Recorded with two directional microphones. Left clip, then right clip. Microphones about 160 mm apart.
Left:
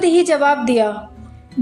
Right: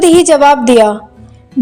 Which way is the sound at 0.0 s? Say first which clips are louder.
Right 8 dB; 50° right (ahead or behind).